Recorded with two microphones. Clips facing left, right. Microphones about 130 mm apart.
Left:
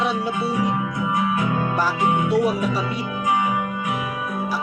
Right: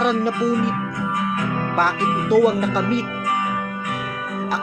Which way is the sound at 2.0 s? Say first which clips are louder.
Left 2 dB; 20° left (ahead or behind).